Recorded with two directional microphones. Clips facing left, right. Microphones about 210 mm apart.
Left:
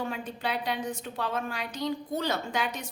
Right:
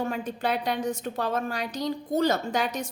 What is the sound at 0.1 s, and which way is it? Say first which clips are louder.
A woman's voice: right 5 dB; 45° right (ahead or behind).